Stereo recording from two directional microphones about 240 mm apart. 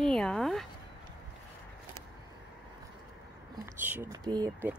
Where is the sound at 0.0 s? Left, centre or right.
Centre.